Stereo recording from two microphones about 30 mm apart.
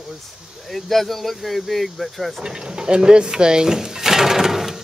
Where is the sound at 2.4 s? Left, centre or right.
Right.